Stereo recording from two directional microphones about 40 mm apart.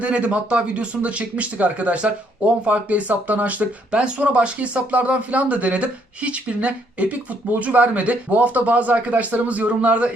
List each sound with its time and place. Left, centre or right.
0.0 s speech: right